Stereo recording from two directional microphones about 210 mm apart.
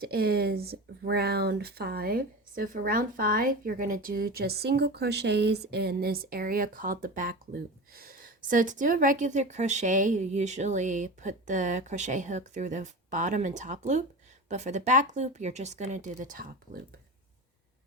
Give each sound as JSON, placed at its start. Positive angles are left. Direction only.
{"t": 0.0, "sound": "speech", "side_deg": -50}